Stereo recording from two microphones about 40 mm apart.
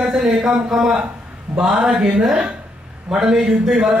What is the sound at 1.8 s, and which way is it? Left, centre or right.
A man's voice, right.